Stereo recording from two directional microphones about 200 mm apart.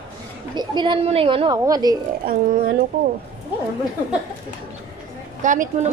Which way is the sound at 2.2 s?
45° right (ahead or behind).